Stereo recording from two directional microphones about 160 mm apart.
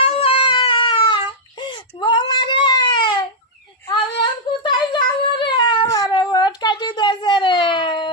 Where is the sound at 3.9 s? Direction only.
30° left (ahead or behind).